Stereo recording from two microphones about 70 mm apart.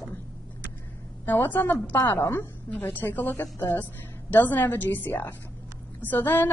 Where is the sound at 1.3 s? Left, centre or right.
Left.